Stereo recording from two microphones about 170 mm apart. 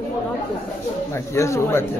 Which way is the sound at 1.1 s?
15° left (ahead or behind).